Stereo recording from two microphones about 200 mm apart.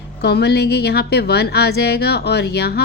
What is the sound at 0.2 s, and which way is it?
A woman's voice, 55° left (ahead or behind).